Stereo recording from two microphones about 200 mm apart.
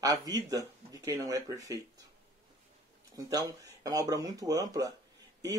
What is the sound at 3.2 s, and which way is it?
Speech, 20° right (ahead or behind).